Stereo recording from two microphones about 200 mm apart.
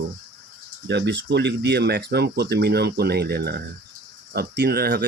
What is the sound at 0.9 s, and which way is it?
Speech, 60° right (ahead or behind).